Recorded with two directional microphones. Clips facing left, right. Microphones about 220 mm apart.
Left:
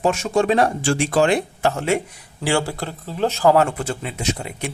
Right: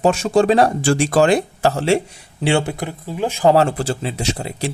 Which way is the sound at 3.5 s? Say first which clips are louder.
Right 2 dB; 30° right (ahead or behind).